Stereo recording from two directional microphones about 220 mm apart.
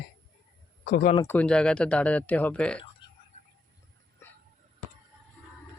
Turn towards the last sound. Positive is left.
turn(degrees=10)  # may be behind; listen again after turning